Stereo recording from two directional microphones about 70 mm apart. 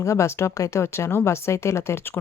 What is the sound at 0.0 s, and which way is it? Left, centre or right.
Speech, left.